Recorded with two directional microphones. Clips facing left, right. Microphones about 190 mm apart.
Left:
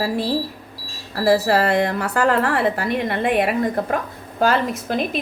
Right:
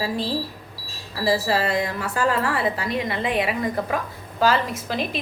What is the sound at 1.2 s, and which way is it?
A woman's voice, 55° left (ahead or behind).